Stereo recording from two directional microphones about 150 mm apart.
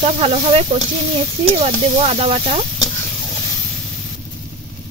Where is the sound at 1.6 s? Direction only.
45° right (ahead or behind).